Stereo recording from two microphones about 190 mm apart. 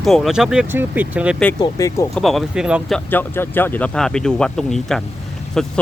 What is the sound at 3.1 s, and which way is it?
Speech, 10° left (ahead or behind).